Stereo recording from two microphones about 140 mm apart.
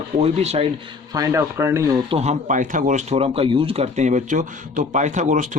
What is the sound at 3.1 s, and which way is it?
Speech, 45° right (ahead or behind).